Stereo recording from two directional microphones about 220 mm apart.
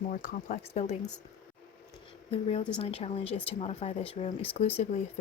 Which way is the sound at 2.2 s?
25° left (ahead or behind).